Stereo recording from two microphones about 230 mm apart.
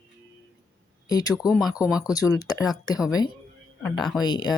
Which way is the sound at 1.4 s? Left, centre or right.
Centre.